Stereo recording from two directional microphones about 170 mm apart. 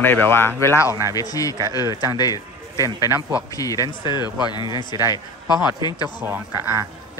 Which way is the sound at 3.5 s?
20° left (ahead or behind).